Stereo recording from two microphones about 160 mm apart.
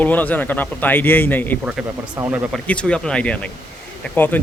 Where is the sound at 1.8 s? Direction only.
5° right (ahead or behind).